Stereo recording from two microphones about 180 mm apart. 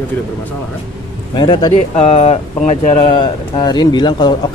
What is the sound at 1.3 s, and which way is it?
Speech, 25° left (ahead or behind).